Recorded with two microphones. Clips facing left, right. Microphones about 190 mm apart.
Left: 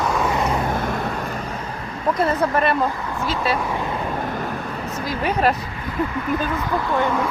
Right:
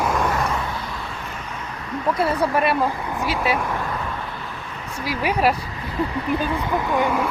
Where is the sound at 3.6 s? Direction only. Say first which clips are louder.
Left 1 dB; 15° left (ahead or behind).